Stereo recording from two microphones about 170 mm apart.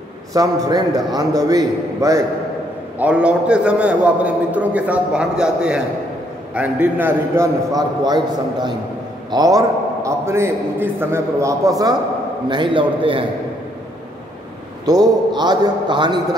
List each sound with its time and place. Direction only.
0.3 s a man's voice: 20° right (ahead or behind)
3.0 s a man's voice: 5° right (ahead or behind)
12.4 s a man's voice: 30° right (ahead or behind)
14.9 s a man's voice: 25° right (ahead or behind)